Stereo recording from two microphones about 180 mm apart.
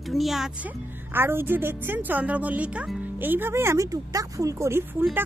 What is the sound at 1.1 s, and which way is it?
Speech, 10° right (ahead or behind).